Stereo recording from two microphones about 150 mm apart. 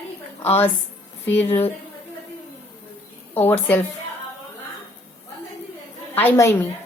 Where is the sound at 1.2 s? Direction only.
15° left (ahead or behind).